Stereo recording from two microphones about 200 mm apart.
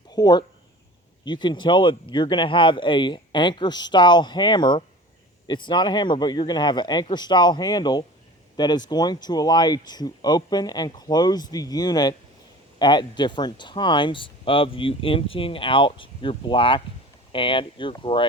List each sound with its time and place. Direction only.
0.1 s speech: 20° left (ahead or behind)